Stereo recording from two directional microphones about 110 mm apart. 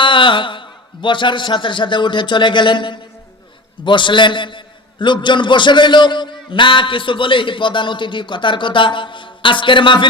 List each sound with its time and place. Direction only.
0.0 s a man's voice: 50° left (ahead or behind)